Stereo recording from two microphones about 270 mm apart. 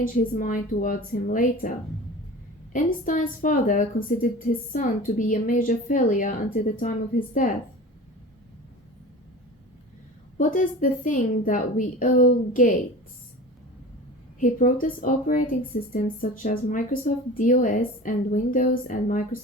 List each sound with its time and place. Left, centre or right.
0.0 s speech: left
2.7 s speech: left
10.3 s speech: left
14.3 s speech: left